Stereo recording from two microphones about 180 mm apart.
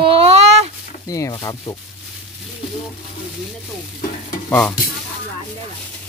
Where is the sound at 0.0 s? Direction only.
30° right (ahead or behind).